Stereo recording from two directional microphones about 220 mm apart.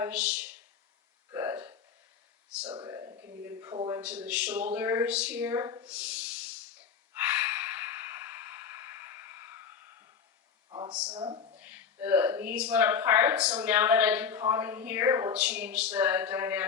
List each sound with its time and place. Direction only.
0.0 s speech: 5° right (ahead or behind)
1.3 s a sound: 15° right (ahead or behind)
3.4 s speech: 15° right (ahead or behind)
7.1 s sigh: 10° right (ahead or behind)
10.7 s speech: 20° right (ahead or behind)
11.6 s speech: 10° right (ahead or behind)